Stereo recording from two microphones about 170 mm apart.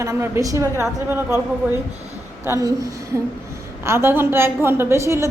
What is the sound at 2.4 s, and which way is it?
A woman's voice, 20° right (ahead or behind).